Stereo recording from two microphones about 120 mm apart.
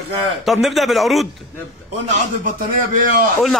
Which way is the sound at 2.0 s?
90° right.